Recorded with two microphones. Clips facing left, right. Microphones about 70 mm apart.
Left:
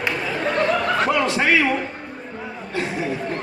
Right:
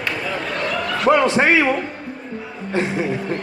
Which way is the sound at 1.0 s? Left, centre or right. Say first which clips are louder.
Right 4 dB; right.